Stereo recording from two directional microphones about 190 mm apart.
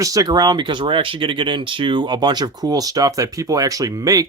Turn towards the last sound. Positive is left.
turn(degrees=-20)  # may be behind; listen again after turning